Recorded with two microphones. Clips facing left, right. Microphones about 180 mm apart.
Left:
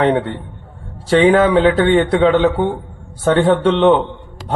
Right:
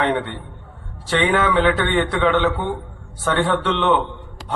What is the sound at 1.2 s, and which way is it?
A man's voice, 35° left (ahead or behind).